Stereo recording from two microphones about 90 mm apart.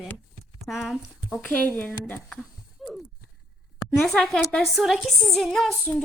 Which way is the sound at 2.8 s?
Centre (ahead or behind).